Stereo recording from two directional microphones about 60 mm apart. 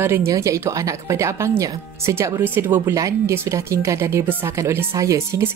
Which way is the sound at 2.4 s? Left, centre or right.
Right.